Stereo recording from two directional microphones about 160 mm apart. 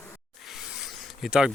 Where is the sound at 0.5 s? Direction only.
5° right (ahead or behind).